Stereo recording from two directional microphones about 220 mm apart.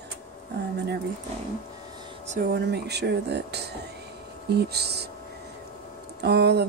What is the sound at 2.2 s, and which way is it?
Speech, 35° right (ahead or behind).